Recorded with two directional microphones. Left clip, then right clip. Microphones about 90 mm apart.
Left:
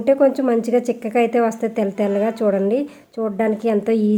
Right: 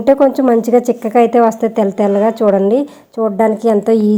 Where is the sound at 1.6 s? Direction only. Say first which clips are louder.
Right 7 dB; 5° left (ahead or behind).